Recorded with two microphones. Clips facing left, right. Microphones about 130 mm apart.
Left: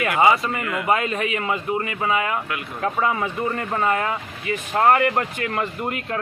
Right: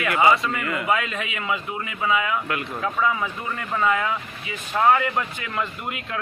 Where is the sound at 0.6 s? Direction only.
Centre (ahead or behind).